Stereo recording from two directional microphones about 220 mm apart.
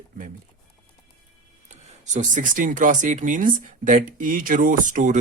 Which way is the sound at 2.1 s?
35° right (ahead or behind).